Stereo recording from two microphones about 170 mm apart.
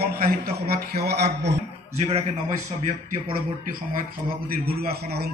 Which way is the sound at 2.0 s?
40° right (ahead or behind).